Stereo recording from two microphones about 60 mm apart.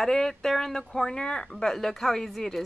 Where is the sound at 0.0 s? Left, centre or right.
Centre.